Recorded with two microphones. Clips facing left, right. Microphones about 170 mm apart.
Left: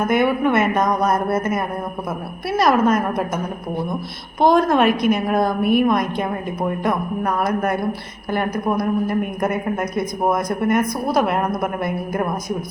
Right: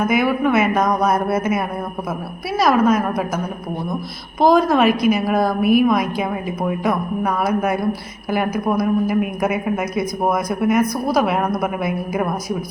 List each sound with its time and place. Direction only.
0.1 s a woman's voice: 5° right (ahead or behind)